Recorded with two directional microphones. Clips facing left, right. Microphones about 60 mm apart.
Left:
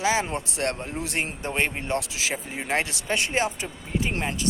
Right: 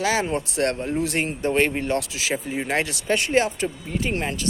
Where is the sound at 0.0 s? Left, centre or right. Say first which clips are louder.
Right 2 dB; centre.